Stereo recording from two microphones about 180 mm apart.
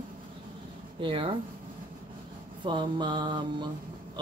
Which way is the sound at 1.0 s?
30° right (ahead or behind).